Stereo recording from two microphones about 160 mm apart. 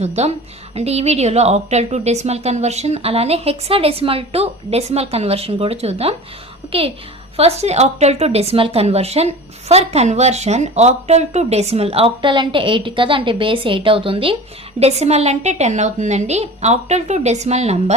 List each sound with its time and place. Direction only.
0.0 s a woman's voice: 40° right (ahead or behind)